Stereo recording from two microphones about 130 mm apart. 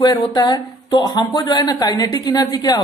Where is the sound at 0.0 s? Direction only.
30° left (ahead or behind).